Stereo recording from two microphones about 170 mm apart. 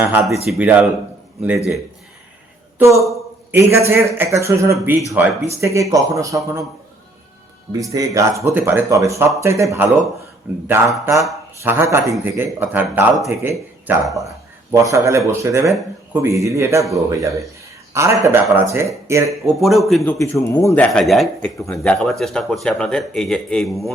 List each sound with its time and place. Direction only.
0.0 s speech: 10° right (ahead or behind)
3.7 s speech: 15° right (ahead or behind)
7.7 s speech: 20° right (ahead or behind)
14.0 s speech: centre (ahead or behind)
14.8 s speech: 15° right (ahead or behind)
19.5 s speech: centre (ahead or behind)
20.3 s speech: 15° left (ahead or behind); by 23.9 s centre (ahead or behind)